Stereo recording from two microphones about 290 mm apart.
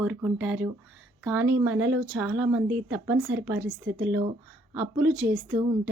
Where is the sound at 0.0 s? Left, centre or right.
Centre.